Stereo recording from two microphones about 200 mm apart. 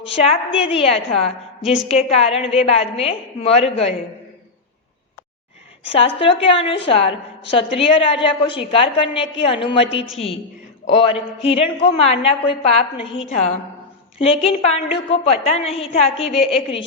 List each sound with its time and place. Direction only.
0.2 s a woman's voice: 30° left (ahead or behind)
5.9 s a man's voice: 30° left (ahead or behind)
14.2 s a man's voice: 30° left (ahead or behind)
15.6 s a woman's voice: centre (ahead or behind)
15.9 s a man's voice: 30° left (ahead or behind)